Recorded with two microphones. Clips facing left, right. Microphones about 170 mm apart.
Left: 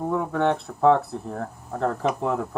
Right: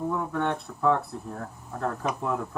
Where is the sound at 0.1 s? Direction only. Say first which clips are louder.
Left 9 dB; 75° left (ahead or behind).